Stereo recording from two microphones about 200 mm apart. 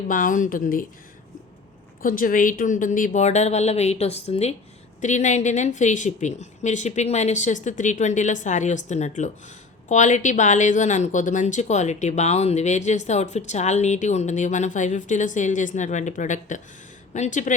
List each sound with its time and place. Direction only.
0.1 s speech: 40° left (ahead or behind)
2.0 s speech: 45° left (ahead or behind)